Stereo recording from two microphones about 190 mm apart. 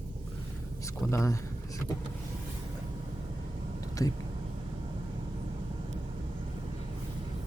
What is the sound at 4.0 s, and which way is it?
Speech, 20° left (ahead or behind).